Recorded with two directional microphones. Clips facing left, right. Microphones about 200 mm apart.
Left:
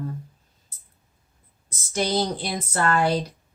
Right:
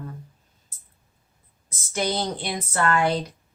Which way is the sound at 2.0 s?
35° left (ahead or behind).